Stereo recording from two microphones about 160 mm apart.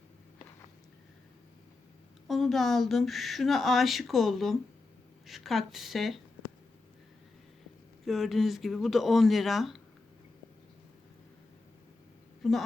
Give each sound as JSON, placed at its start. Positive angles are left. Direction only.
{"t": 2.2, "sound": "speech", "side_deg": 0}
{"t": 8.0, "sound": "speech", "side_deg": 0}
{"t": 12.4, "sound": "a sound", "side_deg": 0}